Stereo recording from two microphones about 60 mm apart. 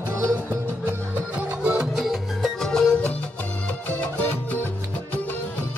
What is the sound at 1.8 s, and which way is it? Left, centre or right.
Music, centre.